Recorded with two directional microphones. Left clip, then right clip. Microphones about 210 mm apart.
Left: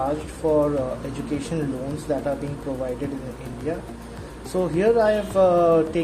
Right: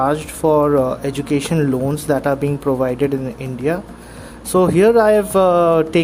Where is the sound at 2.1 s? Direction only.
45° right (ahead or behind).